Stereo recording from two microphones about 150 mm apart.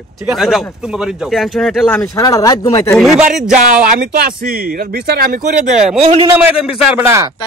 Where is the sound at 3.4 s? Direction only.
55° right (ahead or behind).